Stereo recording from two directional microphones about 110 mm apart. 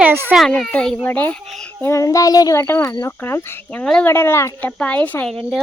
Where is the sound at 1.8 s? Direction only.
25° left (ahead or behind).